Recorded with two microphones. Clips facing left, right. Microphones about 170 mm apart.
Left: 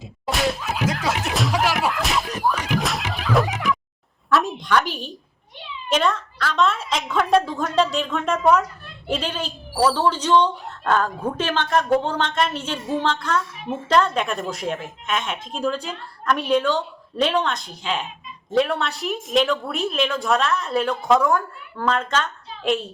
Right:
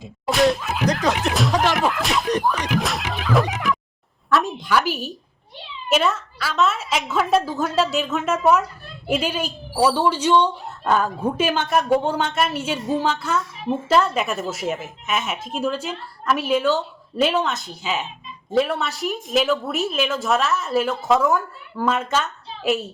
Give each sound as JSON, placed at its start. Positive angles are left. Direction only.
{"t": 0.3, "sound": "a woman's voice", "side_deg": 0}
{"t": 1.2, "sound": "slap", "side_deg": 0}
{"t": 4.3, "sound": "a sound", "side_deg": 0}
{"t": 5.9, "sound": "a woman's voice", "side_deg": -5}